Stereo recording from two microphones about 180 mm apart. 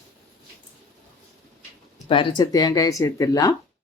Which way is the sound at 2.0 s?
25° left (ahead or behind).